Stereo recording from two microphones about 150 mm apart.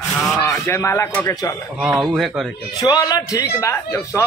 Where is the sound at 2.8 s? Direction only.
25° left (ahead or behind).